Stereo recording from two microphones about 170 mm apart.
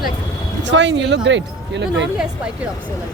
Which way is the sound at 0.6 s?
90° right.